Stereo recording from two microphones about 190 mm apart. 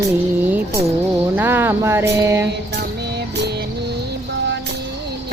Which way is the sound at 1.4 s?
10° right (ahead or behind).